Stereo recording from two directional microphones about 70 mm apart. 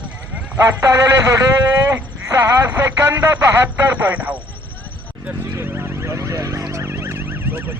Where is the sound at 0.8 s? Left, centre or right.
Right.